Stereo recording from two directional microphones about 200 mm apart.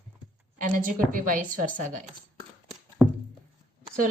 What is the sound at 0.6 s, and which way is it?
A woman's voice, 40° right (ahead or behind).